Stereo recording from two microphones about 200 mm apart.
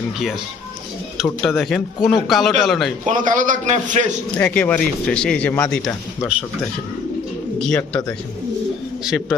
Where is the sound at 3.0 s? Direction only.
40° right (ahead or behind).